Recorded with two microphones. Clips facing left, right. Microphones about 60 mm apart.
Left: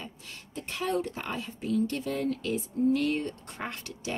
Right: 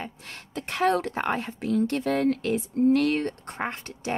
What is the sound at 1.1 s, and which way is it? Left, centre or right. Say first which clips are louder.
A woman's voice: right 8 dB; right.